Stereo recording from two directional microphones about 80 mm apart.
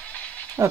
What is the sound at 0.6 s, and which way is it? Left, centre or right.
Speech, right.